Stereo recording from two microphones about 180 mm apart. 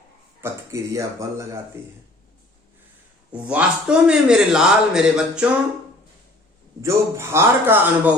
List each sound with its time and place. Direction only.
0.4 s a man's voice: 15° right (ahead or behind)
3.3 s a man's voice: 5° right (ahead or behind)
6.8 s a man's voice: 15° right (ahead or behind)